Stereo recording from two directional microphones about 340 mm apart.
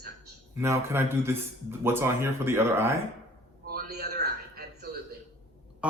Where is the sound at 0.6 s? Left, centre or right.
Centre.